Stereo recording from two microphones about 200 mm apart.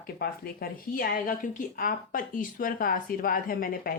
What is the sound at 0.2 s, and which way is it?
Speech, 50° left (ahead or behind).